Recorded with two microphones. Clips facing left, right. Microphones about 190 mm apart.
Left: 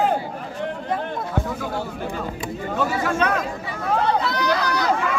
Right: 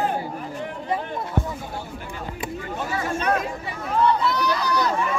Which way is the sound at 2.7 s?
90° left.